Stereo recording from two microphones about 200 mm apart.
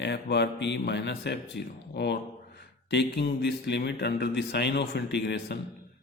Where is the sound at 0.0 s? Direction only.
60° left (ahead or behind).